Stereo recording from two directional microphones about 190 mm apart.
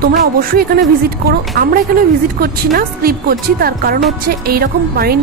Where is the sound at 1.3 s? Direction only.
50° right (ahead or behind).